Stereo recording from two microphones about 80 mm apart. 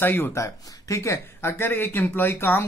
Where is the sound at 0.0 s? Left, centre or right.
Left.